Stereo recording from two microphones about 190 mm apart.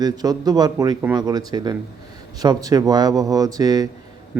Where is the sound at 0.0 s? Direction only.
20° right (ahead or behind).